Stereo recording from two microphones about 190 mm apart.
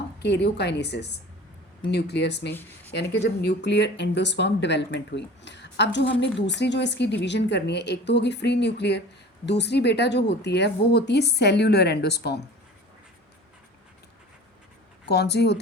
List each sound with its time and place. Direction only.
0.2 s speech: 60° left (ahead or behind)
2.5 s speech: 10° left (ahead or behind)
2.9 s speech: 60° left (ahead or behind)
15.0 s speech: 60° left (ahead or behind)